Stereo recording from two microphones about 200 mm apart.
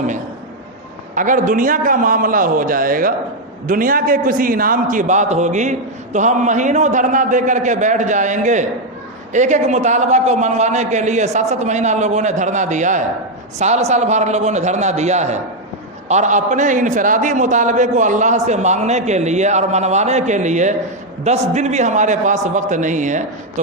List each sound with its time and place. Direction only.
1.1 s a man's voice: 40° right (ahead or behind)